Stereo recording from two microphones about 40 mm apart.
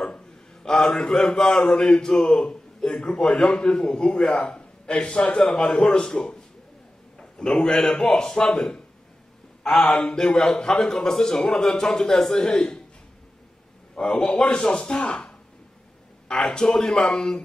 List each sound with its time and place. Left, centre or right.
0.7 s a man's voice: centre
9.6 s mantra: centre
9.9 s a man's voice: centre
14.0 s a man's voice: left
16.3 s a man's voice: centre